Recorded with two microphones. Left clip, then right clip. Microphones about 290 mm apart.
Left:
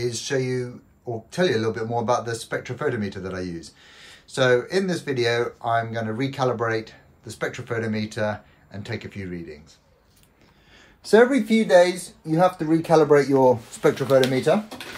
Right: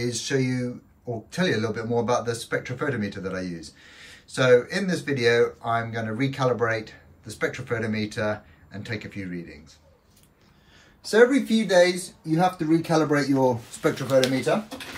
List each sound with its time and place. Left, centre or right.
0.0 s speech: centre
11.0 s speech: left
11.6 s speech: centre; by 14.5 s left